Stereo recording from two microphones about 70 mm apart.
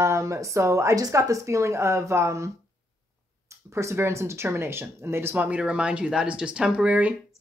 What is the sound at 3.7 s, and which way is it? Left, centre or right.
Speech, right.